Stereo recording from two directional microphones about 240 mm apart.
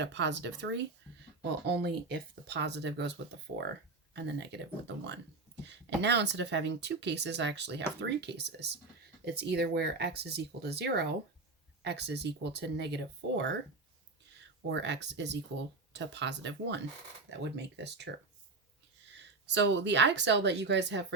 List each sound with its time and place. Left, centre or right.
0.0 s speech: right
4.1 s speech: right
5.6 s speech: right
14.7 s speech: right
19.2 s speech: right